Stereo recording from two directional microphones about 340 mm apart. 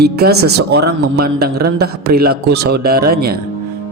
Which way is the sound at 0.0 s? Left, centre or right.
Right.